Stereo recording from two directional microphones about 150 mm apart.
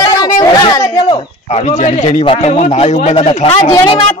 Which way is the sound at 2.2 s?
40° left (ahead or behind).